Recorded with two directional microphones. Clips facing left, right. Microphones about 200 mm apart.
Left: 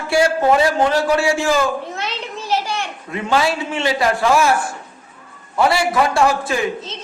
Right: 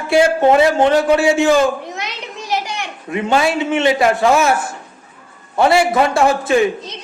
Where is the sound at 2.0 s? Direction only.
15° right (ahead or behind).